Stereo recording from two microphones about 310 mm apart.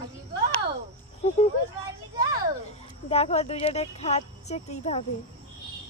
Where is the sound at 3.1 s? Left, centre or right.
Centre.